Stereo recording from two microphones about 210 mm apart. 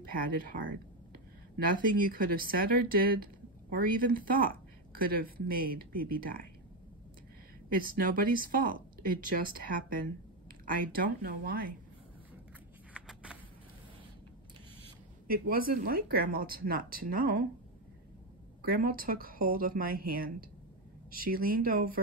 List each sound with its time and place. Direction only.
0.1 s speech: 40° right (ahead or behind)
1.7 s speech: 40° right (ahead or behind)
7.7 s speech: 40° right (ahead or behind)
12.9 s a sound: 5° right (ahead or behind)
15.2 s speech: 45° right (ahead or behind)
18.6 s speech: 45° right (ahead or behind)